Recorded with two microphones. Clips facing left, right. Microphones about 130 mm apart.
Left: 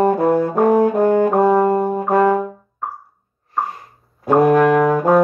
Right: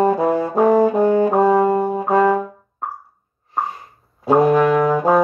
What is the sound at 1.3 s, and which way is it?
Brass instrument, centre (ahead or behind).